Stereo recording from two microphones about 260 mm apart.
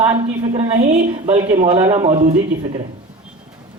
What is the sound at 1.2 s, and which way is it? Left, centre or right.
A man's voice, right.